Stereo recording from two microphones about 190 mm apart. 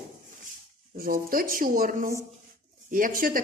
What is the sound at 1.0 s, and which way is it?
A woman's voice, 50° right (ahead or behind).